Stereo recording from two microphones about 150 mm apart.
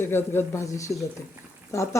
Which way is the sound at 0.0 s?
15° left (ahead or behind).